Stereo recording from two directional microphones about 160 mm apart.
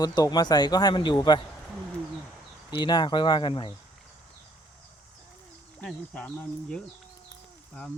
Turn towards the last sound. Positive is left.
turn(degrees=5)  # may be behind; listen again after turning